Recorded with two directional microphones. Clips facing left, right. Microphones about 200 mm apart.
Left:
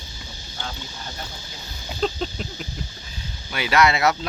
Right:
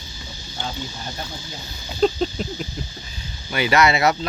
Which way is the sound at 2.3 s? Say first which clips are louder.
Right 5 dB; 40° right (ahead or behind).